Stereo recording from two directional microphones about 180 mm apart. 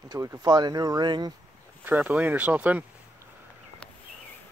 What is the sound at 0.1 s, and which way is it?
Speech, 20° right (ahead or behind).